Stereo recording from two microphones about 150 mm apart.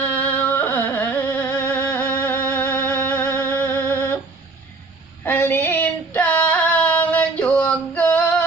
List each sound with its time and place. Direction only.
0.0 s carnatic music: 10° left (ahead or behind)
5.2 s a sound: 15° left (ahead or behind)
6.1 s female singing: 10° left (ahead or behind)